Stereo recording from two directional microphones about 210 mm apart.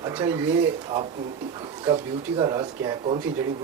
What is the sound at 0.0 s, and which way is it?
Speech, 15° right (ahead or behind).